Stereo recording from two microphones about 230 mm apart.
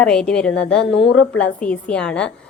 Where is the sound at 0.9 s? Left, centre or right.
Left.